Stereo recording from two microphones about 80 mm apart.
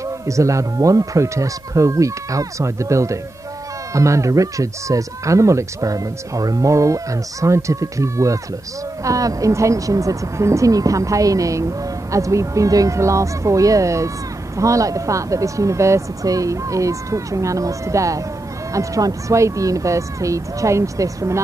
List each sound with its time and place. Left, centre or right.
0.3 s speech: right